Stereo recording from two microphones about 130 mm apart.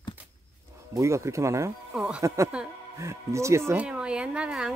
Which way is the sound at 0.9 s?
25° right (ahead or behind).